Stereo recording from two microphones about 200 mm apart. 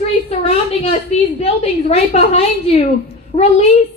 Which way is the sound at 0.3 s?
30° left (ahead or behind).